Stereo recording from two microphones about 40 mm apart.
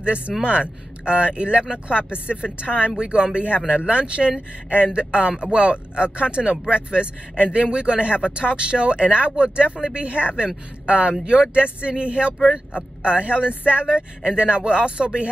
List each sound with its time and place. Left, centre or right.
0.4 s speech: right